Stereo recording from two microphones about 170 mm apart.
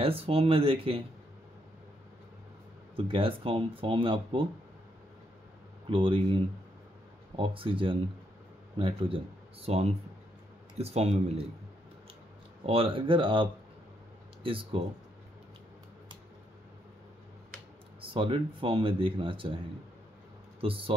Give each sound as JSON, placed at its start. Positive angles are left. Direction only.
{"t": 0.0, "sound": "speech", "side_deg": -35}
{"t": 3.0, "sound": "speech", "side_deg": -30}
{"t": 5.9, "sound": "speech", "side_deg": -30}
{"t": 12.6, "sound": "speech", "side_deg": -35}
{"t": 18.1, "sound": "speech", "side_deg": -30}
{"t": 20.6, "sound": "speech", "side_deg": -30}